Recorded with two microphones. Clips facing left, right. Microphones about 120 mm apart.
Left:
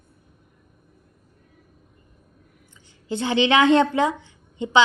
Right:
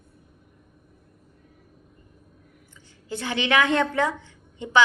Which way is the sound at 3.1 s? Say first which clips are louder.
Left 5 dB; 25° left (ahead or behind).